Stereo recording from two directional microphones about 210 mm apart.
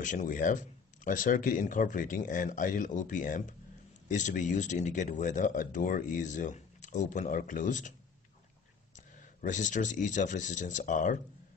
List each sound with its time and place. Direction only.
0.0 s speech: 35° left (ahead or behind)
8.9 s speech: 35° left (ahead or behind)